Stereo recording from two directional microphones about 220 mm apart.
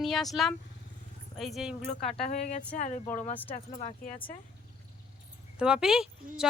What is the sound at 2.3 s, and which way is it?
Speech, 30° left (ahead or behind).